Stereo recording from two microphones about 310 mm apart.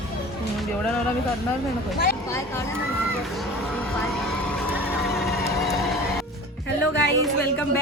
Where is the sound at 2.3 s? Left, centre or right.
Centre.